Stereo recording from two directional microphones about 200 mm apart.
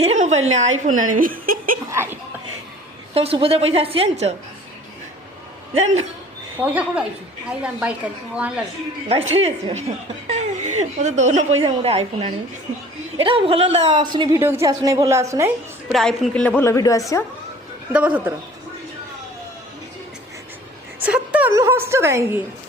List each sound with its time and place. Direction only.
0.0 s a woman's voice: 35° right (ahead or behind)
1.9 s chuckle: 10° right (ahead or behind)
3.2 s a woman's voice: 30° right (ahead or behind)
6.6 s a woman's voice: 5° right (ahead or behind)
9.3 s a woman's voice: 30° right (ahead or behind)
15.9 s a woman's voice: centre (ahead or behind); by 17.0 s 15° left (ahead or behind)
17.9 s a woman's voice: 5° right (ahead or behind)
21.0 s a woman's voice: 5° right (ahead or behind)